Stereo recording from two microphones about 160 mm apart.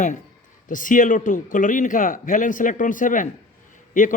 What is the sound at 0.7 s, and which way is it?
A man's voice, 55° left (ahead or behind).